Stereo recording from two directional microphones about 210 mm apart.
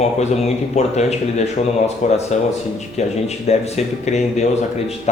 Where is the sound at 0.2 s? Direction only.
30° left (ahead or behind).